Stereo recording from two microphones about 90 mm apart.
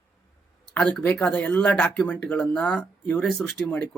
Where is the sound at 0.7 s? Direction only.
15° left (ahead or behind).